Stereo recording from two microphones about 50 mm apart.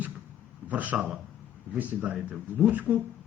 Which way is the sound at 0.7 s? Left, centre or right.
Right.